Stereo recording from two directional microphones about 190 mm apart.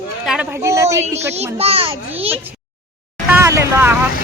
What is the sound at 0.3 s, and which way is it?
Speech, 10° right (ahead or behind).